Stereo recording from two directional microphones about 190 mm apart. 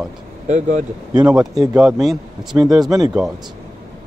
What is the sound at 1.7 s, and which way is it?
Speech, centre (ahead or behind).